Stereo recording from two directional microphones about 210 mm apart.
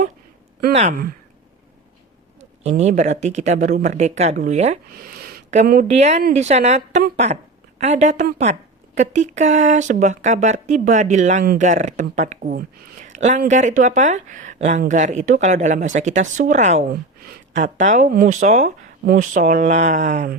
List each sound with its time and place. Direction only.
0.7 s speech: 30° right (ahead or behind)
2.6 s speech: 30° right (ahead or behind)